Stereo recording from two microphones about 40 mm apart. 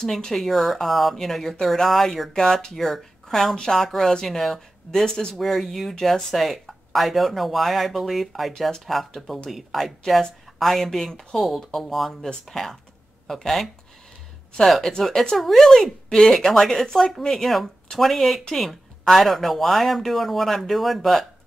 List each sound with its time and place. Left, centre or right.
0.0 s speech: centre
5.0 s speech: centre
5.3 s speech: centre
12.5 s speech: centre